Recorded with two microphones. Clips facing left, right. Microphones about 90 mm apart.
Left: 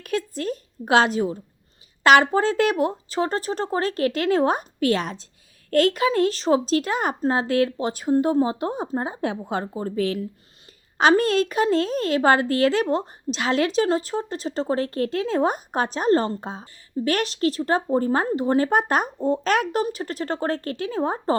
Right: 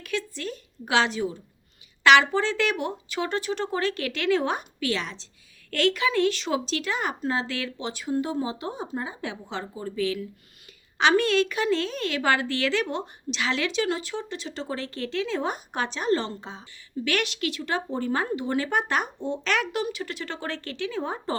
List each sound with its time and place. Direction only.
0.0 s a woman's voice: 45° left (ahead or behind)